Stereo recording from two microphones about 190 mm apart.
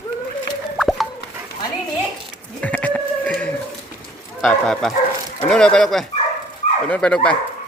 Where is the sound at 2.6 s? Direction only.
10° left (ahead or behind).